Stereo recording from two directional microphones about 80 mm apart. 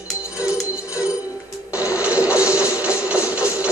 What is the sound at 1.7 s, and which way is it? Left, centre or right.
Printer, centre.